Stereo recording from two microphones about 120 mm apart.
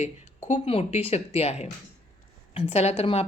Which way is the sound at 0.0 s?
90° left.